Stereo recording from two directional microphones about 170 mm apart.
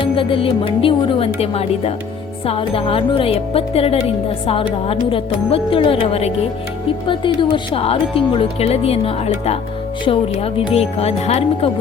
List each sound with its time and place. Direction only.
0.0 s speech: 30° left (ahead or behind)